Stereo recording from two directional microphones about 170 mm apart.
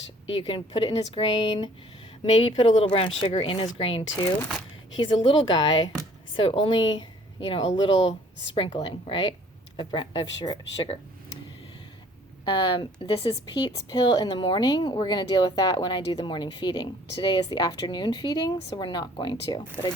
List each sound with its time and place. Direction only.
0.4 s speech: 30° left (ahead or behind)
12.5 s speech: 30° left (ahead or behind)